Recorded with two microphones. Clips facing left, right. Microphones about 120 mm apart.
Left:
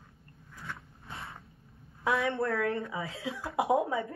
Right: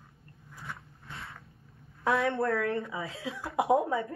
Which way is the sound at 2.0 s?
30° right (ahead or behind).